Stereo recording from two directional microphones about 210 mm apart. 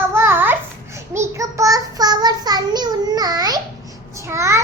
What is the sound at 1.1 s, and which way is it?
Child singing, 15° right (ahead or behind).